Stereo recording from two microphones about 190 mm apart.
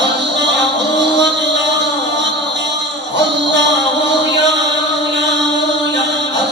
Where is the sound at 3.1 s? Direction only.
70° right (ahead or behind).